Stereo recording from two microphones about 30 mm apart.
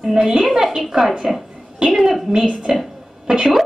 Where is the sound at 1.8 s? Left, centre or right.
Right.